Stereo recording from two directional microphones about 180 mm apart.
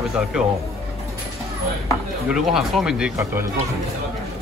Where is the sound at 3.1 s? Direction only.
15° right (ahead or behind).